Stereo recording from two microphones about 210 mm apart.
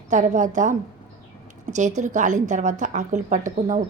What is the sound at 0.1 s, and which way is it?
A woman's voice, 35° right (ahead or behind).